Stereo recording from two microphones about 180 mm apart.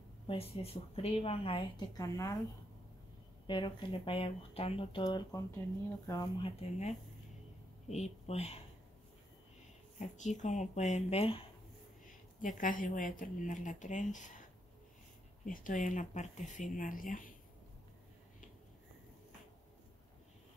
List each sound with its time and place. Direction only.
0.3 s a woman's voice: 35° left (ahead or behind)
2.0 s speech: 15° left (ahead or behind)
3.4 s a woman's voice: 25° left (ahead or behind)
9.9 s a woman's voice: 40° left (ahead or behind)
12.4 s speech: 50° left (ahead or behind)
15.4 s speech: 50° left (ahead or behind)